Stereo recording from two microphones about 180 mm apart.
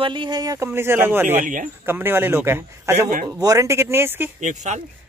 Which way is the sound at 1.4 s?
45° right (ahead or behind).